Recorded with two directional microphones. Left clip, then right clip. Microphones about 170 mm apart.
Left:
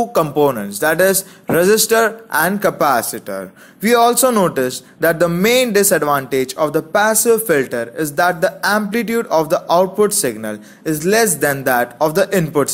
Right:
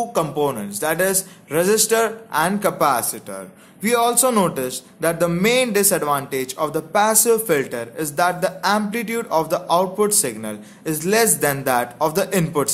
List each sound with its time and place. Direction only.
0.0 s speech: 25° left (ahead or behind)